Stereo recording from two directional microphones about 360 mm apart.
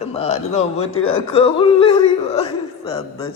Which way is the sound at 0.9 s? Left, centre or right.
Left.